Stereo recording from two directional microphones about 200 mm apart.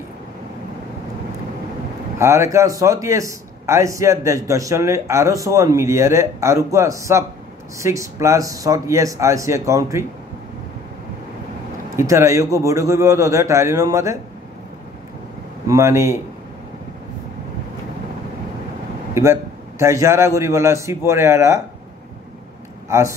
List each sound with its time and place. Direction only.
2.1 s a man's voice: 15° right (ahead or behind)
12.0 s a man's voice: 15° right (ahead or behind)
15.6 s a man's voice: 15° right (ahead or behind)
19.8 s a man's voice: 15° right (ahead or behind)
22.8 s speech: 15° right (ahead or behind)